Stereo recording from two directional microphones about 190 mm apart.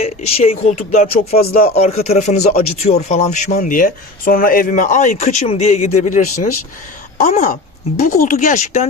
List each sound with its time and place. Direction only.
0.0 s a man's voice: 35° left (ahead or behind)